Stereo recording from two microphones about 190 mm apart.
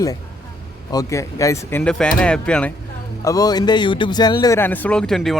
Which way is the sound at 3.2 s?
20° left (ahead or behind).